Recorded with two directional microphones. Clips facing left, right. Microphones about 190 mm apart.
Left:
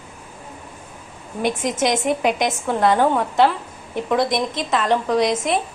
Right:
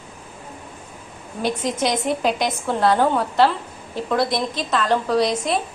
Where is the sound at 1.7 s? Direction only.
20° left (ahead or behind).